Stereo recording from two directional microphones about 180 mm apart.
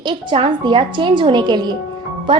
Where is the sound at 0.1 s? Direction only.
25° right (ahead or behind).